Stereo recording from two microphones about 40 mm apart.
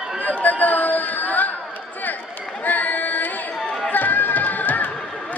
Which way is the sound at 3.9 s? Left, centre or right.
Left.